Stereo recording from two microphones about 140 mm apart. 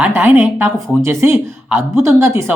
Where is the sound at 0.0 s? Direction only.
15° right (ahead or behind).